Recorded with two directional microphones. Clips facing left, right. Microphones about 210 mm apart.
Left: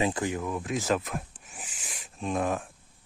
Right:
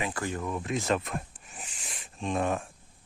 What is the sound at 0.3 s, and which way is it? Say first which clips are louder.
Speech: left 1 dB; centre (ahead or behind).